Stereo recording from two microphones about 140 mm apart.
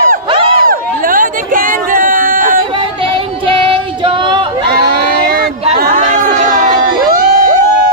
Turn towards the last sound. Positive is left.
turn(degrees=-70)  # may be behind; listen again after turning